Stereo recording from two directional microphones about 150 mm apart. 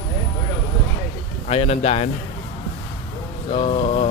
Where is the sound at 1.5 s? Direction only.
45° left (ahead or behind).